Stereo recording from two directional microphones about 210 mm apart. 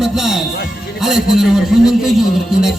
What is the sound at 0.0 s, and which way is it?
A man's voice, centre (ahead or behind).